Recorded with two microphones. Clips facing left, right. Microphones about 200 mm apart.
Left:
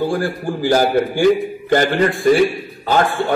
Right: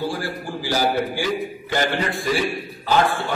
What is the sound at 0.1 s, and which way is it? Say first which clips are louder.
A man's voice: left 7 dB; 50° left (ahead or behind).